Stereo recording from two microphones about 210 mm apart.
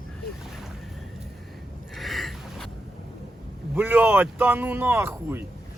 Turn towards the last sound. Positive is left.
turn(degrees=-10)  # may be behind; listen again after turning